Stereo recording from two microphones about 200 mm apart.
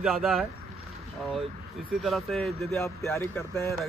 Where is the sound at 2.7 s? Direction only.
15° left (ahead or behind).